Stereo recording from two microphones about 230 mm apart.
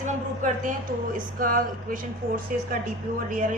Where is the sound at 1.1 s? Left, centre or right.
Right.